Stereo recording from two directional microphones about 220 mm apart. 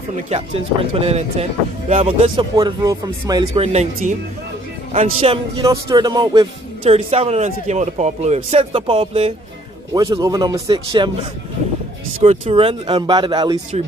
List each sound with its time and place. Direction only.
0.3 s speech: 30° right (ahead or behind)
5.2 s speech: 25° right (ahead or behind)
9.9 s a man's voice: 15° right (ahead or behind)
12.2 s speech: 30° right (ahead or behind)